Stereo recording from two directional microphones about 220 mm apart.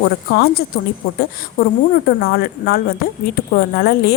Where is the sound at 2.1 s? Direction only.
45° left (ahead or behind).